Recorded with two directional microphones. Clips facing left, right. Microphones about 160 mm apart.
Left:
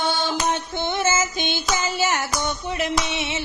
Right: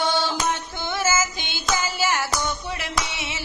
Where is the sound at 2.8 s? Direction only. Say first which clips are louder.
Left 5 dB; 25° left (ahead or behind).